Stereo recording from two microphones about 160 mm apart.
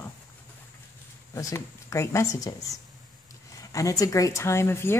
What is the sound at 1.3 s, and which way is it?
Speech, 20° left (ahead or behind).